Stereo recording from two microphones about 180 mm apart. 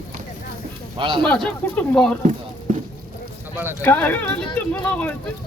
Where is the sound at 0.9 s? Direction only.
25° right (ahead or behind).